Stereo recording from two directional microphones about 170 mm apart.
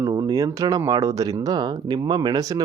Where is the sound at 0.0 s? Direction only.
15° right (ahead or behind).